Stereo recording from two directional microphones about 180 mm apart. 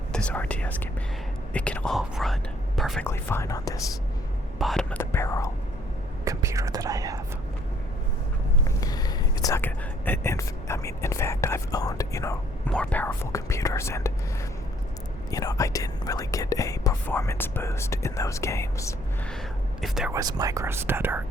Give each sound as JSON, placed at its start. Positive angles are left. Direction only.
{"t": 0.1, "sound": "speech", "side_deg": 5}
{"t": 3.1, "sound": "speech", "side_deg": 15}
{"t": 4.5, "sound": "speech", "side_deg": 0}
{"t": 6.2, "sound": "speech", "side_deg": -15}
{"t": 8.6, "sound": "speech", "side_deg": 20}
{"t": 15.3, "sound": "speech", "side_deg": 20}
{"t": 19.8, "sound": "speech", "side_deg": 0}
{"t": 20.1, "sound": "speech", "side_deg": -20}